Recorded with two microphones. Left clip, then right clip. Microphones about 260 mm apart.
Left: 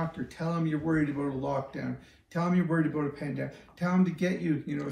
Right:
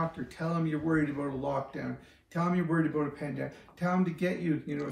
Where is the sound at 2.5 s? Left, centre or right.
Centre.